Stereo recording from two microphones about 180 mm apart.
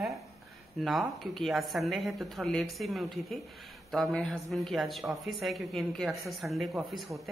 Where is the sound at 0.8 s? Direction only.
Centre (ahead or behind).